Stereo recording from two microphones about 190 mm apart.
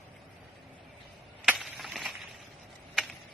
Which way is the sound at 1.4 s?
Centre (ahead or behind).